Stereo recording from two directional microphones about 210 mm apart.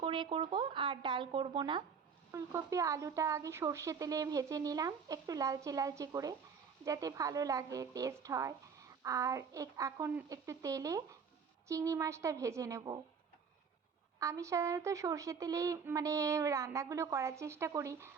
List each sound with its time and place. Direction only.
0.0 s a woman's voice: 25° right (ahead or behind)
14.2 s a woman's voice: 15° right (ahead or behind)